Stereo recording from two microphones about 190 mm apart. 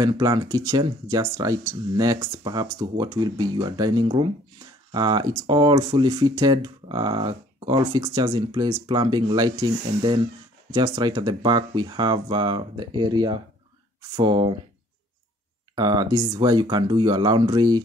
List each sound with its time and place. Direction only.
0.0 s speech: 20° right (ahead or behind)
15.7 s speech: 20° right (ahead or behind)